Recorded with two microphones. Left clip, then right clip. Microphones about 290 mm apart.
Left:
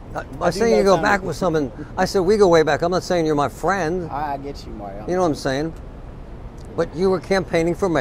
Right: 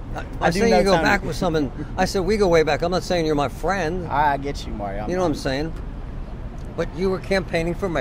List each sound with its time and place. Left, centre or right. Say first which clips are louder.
0.5 s a man's voice: left 1 dB; left
4.1 s speech: right 6 dB; right
5.0 s a man's voice: left 4 dB; left
6.8 s speech: left 4 dB; left